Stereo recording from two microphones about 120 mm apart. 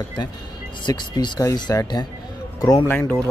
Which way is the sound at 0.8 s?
35° left (ahead or behind).